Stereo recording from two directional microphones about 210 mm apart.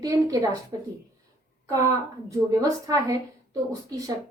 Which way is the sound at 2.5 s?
15° right (ahead or behind).